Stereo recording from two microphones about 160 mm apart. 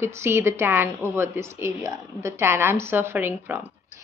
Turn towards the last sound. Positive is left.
turn(degrees=-15)  # may be behind; listen again after turning